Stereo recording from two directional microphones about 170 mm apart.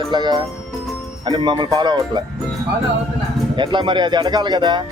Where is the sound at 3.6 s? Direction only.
30° right (ahead or behind).